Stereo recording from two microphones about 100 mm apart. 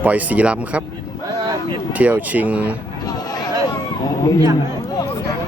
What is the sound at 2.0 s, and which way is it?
Speech, 15° right (ahead or behind).